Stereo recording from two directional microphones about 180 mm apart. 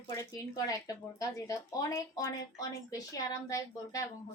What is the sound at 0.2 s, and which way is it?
Speech, 20° left (ahead or behind).